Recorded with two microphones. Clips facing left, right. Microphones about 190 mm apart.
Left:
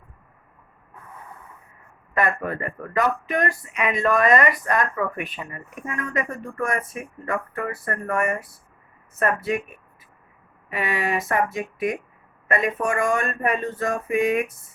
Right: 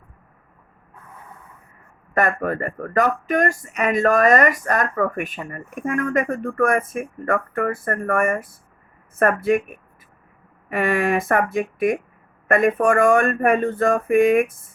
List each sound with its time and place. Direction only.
2.1 s speech: 45° right (ahead or behind)